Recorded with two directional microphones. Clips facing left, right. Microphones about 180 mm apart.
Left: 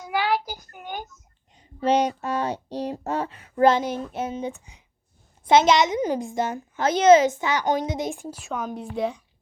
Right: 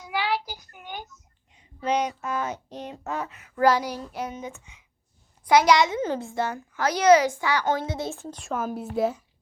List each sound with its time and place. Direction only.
0.0 s child singing: 45° left (ahead or behind)
1.8 s speech: 30° left (ahead or behind)
5.5 s a child's voice: 25° left (ahead or behind)
8.4 s speech: centre (ahead or behind)